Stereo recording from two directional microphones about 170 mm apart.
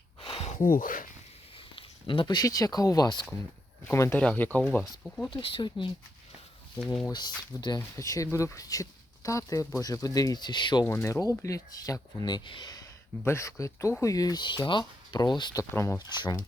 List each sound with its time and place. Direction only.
0.2 s a sound: 35° left (ahead or behind); by 1.0 s 55° left (ahead or behind)
1.7 s speech: 30° left (ahead or behind); by 5.3 s 5° left (ahead or behind)
5.3 s speech: 30° left (ahead or behind)
6.8 s speech: 5° left (ahead or behind)
7.1 s speech: 25° left (ahead or behind)
15.7 s speech: 15° left (ahead or behind)